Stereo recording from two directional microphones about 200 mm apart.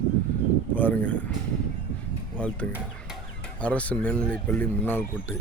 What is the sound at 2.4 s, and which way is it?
Speech, 5° left (ahead or behind).